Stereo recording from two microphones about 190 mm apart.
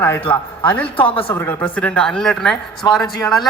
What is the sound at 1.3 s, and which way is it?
A man's voice, 10° left (ahead or behind).